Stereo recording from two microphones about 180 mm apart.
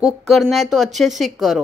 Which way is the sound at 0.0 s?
Centre (ahead or behind).